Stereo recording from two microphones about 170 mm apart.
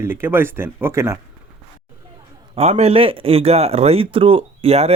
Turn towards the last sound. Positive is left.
turn(degrees=-35)  # may be behind; listen again after turning